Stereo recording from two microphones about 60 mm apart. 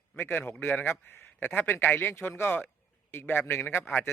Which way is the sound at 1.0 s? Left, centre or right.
Left.